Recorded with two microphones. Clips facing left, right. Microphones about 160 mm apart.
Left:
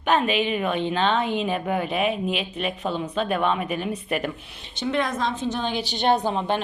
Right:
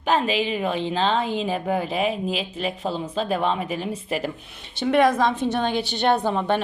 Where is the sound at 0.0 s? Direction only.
30° right (ahead or behind).